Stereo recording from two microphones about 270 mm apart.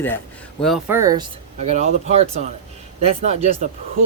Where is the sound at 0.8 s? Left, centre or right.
Centre.